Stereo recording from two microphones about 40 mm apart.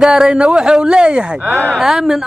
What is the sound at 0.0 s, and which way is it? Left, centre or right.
Speech, centre.